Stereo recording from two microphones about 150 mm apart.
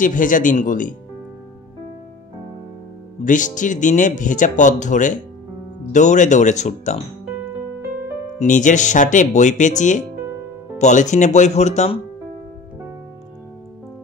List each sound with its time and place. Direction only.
0.0 s speech: 60° left (ahead or behind)
3.3 s speech: 60° left (ahead or behind)
8.4 s speech: 55° left (ahead or behind)